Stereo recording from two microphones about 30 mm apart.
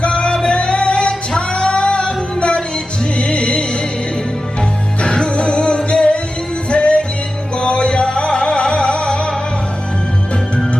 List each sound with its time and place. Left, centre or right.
0.0 s music: left
5.0 s music: left